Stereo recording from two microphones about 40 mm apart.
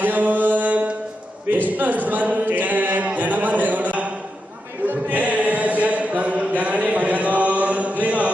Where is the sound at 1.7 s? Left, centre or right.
Right.